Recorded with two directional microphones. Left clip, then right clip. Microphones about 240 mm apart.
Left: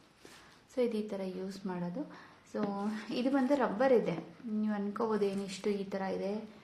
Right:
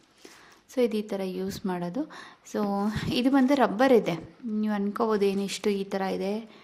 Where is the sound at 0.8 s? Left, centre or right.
Right.